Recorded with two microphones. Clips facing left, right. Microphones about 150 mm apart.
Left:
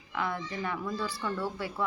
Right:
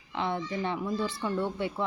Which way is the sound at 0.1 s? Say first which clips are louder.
Right 3 dB; 25° right (ahead or behind).